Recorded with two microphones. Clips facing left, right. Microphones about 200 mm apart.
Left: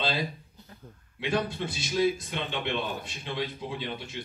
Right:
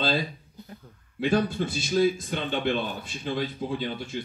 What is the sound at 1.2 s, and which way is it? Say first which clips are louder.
A man's voice: right 5 dB; 45° right (ahead or behind).